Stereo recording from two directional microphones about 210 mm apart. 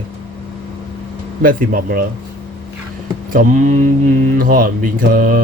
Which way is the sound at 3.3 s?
35° right (ahead or behind).